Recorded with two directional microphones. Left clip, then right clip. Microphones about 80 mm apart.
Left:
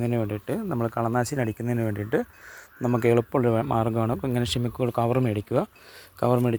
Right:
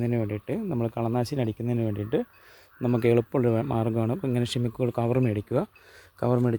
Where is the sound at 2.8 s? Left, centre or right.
Right.